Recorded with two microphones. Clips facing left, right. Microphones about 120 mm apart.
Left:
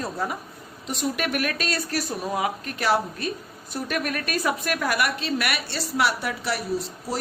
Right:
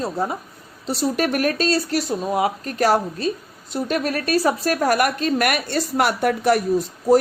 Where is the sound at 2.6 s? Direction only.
40° right (ahead or behind).